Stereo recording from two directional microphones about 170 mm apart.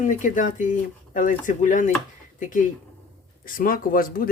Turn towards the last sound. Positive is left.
turn(degrees=55)  # may be behind; listen again after turning